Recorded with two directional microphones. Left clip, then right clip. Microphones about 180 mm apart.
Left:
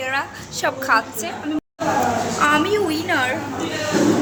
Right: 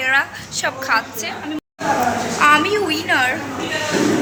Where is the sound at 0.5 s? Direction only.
45° left (ahead or behind).